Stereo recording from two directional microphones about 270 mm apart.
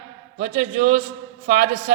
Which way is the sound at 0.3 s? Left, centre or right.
Right.